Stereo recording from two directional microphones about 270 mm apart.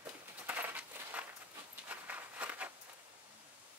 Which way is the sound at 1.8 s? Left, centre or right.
Centre.